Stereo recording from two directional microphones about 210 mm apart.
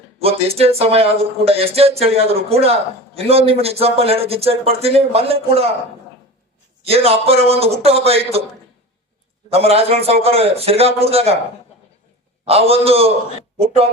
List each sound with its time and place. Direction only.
0.2 s speech: 30° right (ahead or behind)
6.8 s speech: 30° right (ahead or behind)
9.5 s speech: 30° right (ahead or behind)
12.5 s speech: 30° right (ahead or behind)